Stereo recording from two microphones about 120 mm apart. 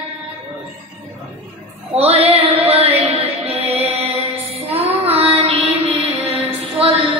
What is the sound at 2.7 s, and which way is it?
Music, 55° right (ahead or behind).